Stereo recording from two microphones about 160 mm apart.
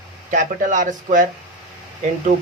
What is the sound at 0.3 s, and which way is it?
A man's voice, 50° right (ahead or behind).